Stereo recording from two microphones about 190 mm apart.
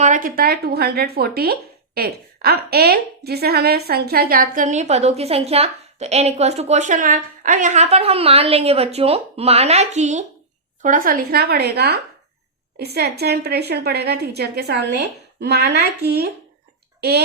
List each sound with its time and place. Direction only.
0.0 s a woman's voice: 45° right (ahead or behind)